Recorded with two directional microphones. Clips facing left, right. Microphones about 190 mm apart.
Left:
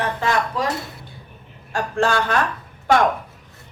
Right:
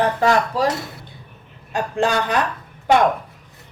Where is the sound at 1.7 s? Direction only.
20° right (ahead or behind).